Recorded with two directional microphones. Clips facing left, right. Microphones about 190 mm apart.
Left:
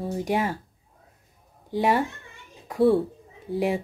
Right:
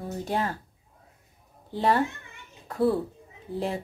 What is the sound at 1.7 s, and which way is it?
Speech, 15° left (ahead or behind).